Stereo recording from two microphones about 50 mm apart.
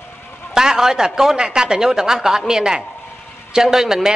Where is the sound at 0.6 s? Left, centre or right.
Centre.